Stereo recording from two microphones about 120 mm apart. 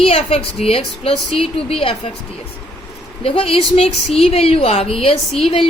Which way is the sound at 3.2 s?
50° left (ahead or behind).